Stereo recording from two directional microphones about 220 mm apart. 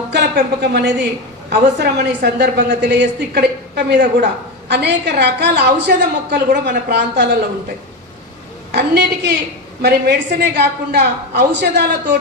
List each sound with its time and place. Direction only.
0.1 s a woman's voice: 50° right (ahead or behind)
8.7 s a woman's voice: 50° right (ahead or behind)